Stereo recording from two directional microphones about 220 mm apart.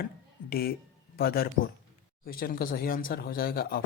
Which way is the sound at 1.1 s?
45° left (ahead or behind).